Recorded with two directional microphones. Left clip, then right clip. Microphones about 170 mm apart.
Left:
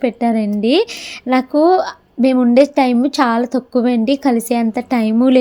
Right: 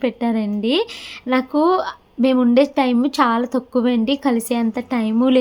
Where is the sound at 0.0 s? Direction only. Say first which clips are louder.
Left 4 dB; 20° left (ahead or behind).